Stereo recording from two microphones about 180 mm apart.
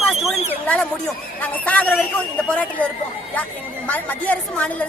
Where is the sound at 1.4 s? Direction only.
10° left (ahead or behind).